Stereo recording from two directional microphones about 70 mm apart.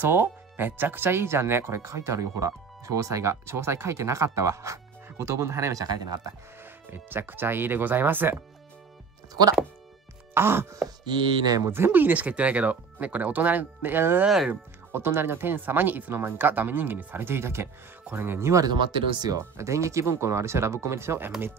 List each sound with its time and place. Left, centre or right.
0.0 s speech: right
6.9 s speech: right
9.3 s speech: right
10.3 s speech: right
11.1 s chopping: right
11.6 s speech: right
11.9 s speech: right
14.2 s speech: centre
14.5 s speech: right
18.7 s speech: right
19.3 s speech: right